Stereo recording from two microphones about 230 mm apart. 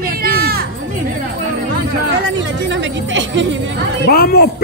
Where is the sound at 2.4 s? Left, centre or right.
Right.